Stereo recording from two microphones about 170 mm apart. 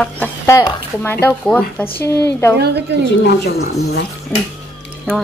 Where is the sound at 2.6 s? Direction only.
75° right (ahead or behind).